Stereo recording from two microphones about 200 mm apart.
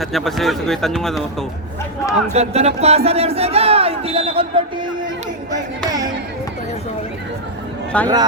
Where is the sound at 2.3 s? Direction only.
30° right (ahead or behind).